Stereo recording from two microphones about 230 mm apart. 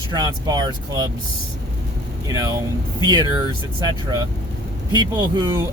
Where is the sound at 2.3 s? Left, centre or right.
Centre.